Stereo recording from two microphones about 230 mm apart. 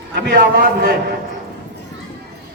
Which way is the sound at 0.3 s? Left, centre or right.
Right.